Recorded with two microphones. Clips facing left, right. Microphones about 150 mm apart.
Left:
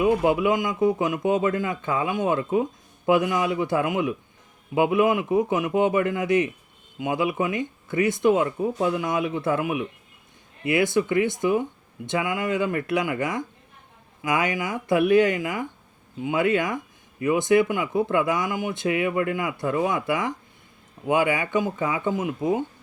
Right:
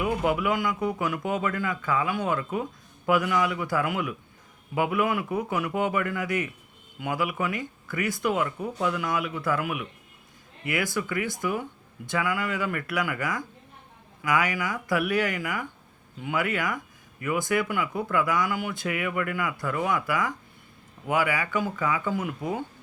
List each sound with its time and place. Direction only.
0.0 s speech: 25° left (ahead or behind)